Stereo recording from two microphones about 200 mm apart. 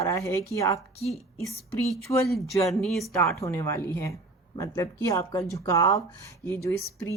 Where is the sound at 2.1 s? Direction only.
20° left (ahead or behind).